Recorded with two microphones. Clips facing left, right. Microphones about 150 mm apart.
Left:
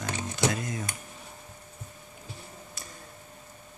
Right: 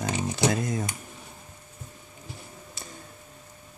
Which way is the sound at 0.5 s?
35° right (ahead or behind).